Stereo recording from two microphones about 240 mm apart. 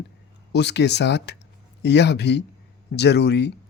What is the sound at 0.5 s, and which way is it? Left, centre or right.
Speech, left.